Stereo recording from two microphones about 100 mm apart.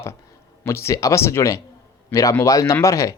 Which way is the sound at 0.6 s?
25° left (ahead or behind).